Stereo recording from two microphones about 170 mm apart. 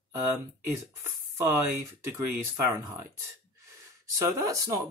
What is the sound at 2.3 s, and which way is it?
Speech, 15° right (ahead or behind).